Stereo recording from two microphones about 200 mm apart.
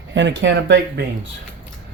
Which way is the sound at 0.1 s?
65° right (ahead or behind).